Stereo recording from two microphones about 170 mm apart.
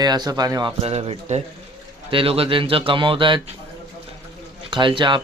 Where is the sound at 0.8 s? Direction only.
35° right (ahead or behind).